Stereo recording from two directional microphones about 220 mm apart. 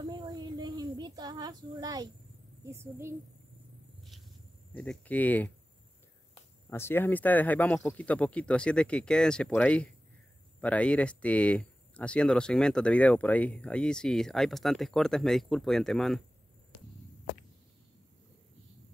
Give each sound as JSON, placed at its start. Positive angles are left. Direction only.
{"t": 0.0, "sound": "child singing", "side_deg": -20}
{"t": 2.6, "sound": "a woman's voice", "side_deg": -10}
{"t": 4.7, "sound": "speech", "side_deg": 5}
{"t": 6.7, "sound": "speech", "side_deg": 10}